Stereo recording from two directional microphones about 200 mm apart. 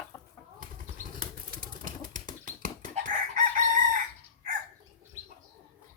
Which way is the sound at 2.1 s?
40° right (ahead or behind).